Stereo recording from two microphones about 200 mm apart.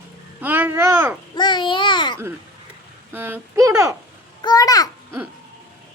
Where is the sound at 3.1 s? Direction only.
10° right (ahead or behind).